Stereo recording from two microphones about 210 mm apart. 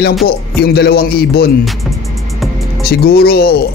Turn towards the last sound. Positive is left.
turn(degrees=45)  # may be behind; listen again after turning